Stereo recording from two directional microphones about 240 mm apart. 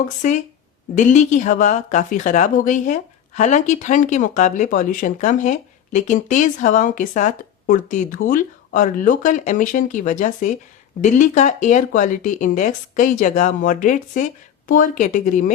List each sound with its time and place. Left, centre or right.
0.2 s a woman's voice: left